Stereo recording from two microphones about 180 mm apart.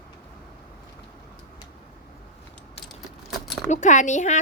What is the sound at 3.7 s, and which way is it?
Speech, 45° left (ahead or behind).